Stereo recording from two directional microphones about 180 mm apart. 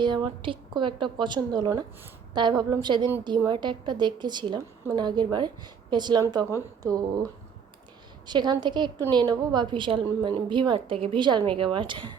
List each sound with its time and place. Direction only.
0.0 s a woman's voice: 25° right (ahead or behind)
8.3 s a woman's voice: 25° right (ahead or behind)